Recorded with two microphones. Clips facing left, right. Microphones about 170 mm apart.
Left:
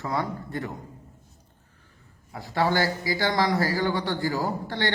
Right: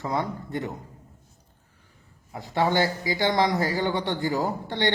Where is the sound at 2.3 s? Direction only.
20° right (ahead or behind).